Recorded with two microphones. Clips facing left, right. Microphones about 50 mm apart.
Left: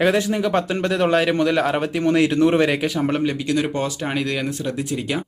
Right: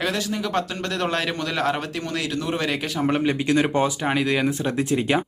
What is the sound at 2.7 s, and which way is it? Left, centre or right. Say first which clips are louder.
Speech: left 2 dB; centre.